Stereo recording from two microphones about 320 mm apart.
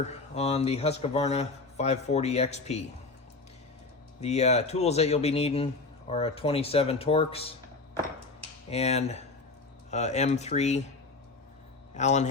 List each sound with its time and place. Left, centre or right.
0.0 s speech: centre
4.2 s speech: left
8.7 s speech: centre
11.9 s speech: left